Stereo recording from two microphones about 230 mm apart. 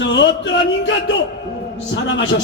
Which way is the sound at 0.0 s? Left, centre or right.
Left.